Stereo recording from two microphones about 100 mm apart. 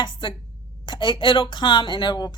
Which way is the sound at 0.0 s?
55° left (ahead or behind).